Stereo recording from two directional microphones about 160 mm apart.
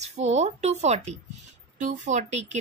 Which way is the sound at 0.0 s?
45° right (ahead or behind).